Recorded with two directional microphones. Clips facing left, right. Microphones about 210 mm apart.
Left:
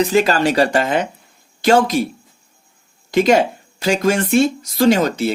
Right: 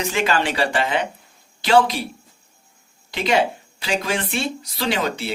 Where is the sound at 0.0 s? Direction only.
40° left (ahead or behind).